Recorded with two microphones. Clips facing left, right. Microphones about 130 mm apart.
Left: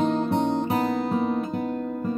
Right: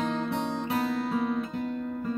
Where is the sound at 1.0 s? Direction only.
20° left (ahead or behind).